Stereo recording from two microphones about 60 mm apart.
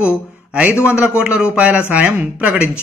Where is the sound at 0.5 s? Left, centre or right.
Right.